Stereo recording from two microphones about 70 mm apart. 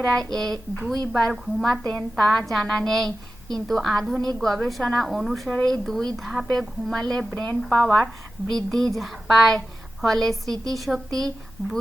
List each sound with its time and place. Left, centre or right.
0.0 s a woman's voice: centre
1.8 s a woman's voice: left
2.1 s a woman's voice: centre